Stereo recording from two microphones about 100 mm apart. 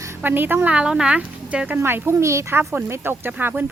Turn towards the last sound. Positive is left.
turn(degrees=-20)  # may be behind; listen again after turning